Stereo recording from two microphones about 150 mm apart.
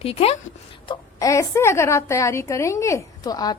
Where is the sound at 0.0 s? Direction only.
40° left (ahead or behind).